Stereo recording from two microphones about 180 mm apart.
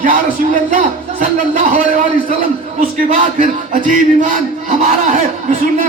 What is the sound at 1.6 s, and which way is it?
A man's voice, 45° right (ahead or behind).